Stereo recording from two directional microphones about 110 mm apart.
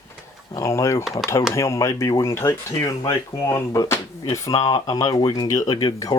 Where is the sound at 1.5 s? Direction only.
25° left (ahead or behind).